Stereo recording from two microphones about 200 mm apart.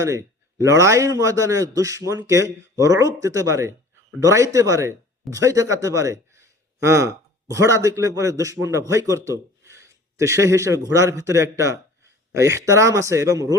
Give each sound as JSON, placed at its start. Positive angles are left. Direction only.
{"t": 0.0, "sound": "a man's voice", "side_deg": -15}